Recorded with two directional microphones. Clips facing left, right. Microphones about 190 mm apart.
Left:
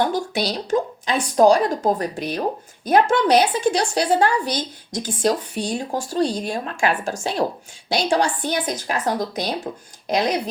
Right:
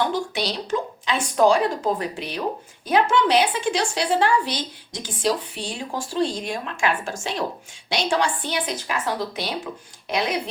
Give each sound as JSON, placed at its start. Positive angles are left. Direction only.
{"t": 0.3, "sound": "a woman's voice", "side_deg": 40}